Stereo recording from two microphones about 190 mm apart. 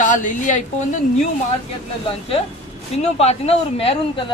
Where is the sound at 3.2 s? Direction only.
35° left (ahead or behind).